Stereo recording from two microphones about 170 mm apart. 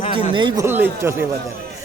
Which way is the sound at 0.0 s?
35° left (ahead or behind).